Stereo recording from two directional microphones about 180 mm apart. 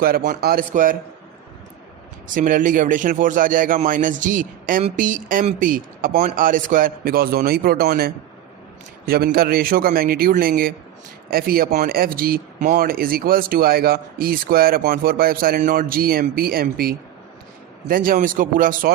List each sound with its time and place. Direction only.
0.0 s a man's voice: 50° right (ahead or behind)
2.3 s a man's voice: 45° right (ahead or behind)